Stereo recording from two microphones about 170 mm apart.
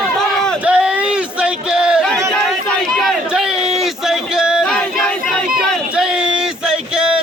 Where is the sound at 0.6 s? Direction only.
5° right (ahead or behind).